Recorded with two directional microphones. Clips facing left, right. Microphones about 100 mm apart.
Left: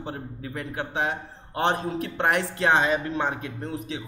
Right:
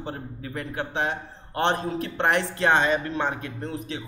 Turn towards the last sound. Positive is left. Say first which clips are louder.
# even
turn(degrees=5)  # may be behind; listen again after turning